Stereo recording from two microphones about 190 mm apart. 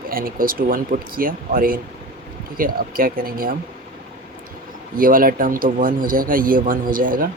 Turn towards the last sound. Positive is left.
turn(degrees=-45)  # may be behind; listen again after turning